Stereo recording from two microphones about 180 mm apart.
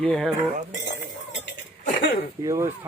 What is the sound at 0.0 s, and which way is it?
Speech, 5° left (ahead or behind).